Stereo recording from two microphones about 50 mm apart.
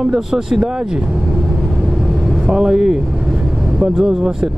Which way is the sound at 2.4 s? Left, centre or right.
Centre.